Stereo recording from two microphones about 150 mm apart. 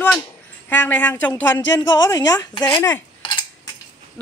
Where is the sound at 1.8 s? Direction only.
25° left (ahead or behind).